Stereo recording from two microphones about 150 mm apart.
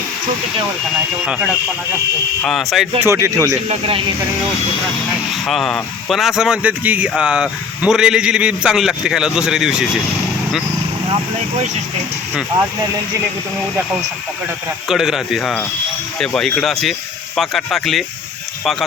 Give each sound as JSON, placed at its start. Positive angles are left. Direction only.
{"t": 2.4, "sound": "speech", "side_deg": 0}
{"t": 3.0, "sound": "speech", "side_deg": -20}
{"t": 3.7, "sound": "speech", "side_deg": -35}
{"t": 5.5, "sound": "speech", "side_deg": 0}
{"t": 14.8, "sound": "speech", "side_deg": 0}